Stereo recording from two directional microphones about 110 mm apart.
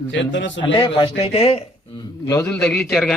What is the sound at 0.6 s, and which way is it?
Speech, 55° left (ahead or behind).